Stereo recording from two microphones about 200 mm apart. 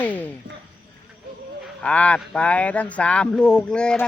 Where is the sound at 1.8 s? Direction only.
5° left (ahead or behind).